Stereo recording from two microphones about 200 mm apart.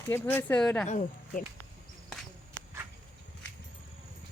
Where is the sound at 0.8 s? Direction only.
40° left (ahead or behind).